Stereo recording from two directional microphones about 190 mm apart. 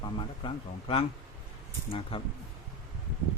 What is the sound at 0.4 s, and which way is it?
Speech, 30° left (ahead or behind).